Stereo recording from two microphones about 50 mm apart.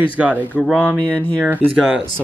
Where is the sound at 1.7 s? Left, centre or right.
Centre.